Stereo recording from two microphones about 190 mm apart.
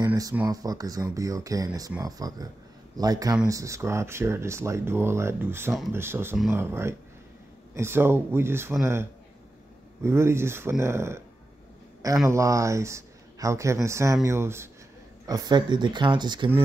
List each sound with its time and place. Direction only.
0.0 s speech: 15° right (ahead or behind)
10.0 s speech: 15° right (ahead or behind)
12.3 s speech: 15° right (ahead or behind)